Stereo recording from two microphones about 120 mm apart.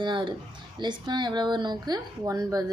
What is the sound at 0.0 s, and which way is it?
A woman's voice, 40° right (ahead or behind).